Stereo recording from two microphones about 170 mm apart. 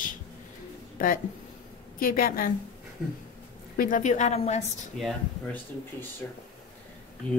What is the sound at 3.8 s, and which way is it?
Speech, 50° left (ahead or behind).